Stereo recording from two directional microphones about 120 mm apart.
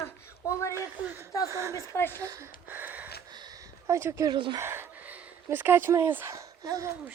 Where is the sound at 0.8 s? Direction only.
15° right (ahead or behind).